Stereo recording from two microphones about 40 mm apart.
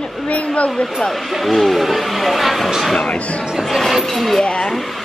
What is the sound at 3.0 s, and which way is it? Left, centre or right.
Speech, left.